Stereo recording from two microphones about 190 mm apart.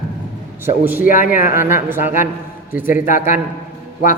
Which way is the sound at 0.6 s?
10° right (ahead or behind).